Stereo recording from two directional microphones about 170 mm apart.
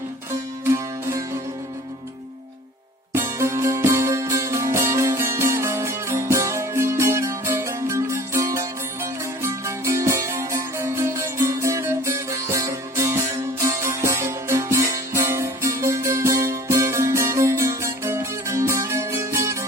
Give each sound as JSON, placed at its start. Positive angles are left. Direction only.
{"t": 0.6, "sound": "music", "side_deg": -15}
{"t": 3.2, "sound": "music", "side_deg": -15}